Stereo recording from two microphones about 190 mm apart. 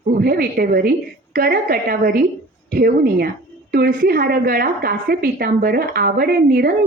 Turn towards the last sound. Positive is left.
turn(degrees=-55)  # may be behind; listen again after turning